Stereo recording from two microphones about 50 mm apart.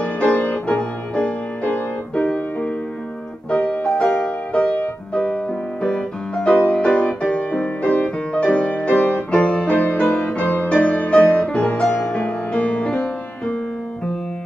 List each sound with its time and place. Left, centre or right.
0.0 s music: left